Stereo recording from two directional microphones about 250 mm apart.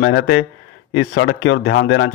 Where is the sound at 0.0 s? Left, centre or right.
Left.